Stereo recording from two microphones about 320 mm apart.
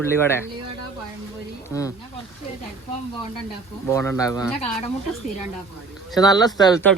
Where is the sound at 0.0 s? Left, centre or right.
Centre.